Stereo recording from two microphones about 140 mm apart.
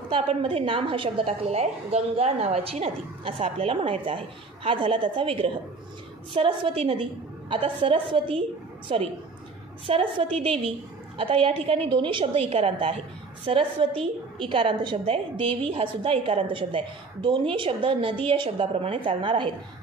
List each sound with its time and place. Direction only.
0.1 s a woman's voice: 40° right (ahead or behind)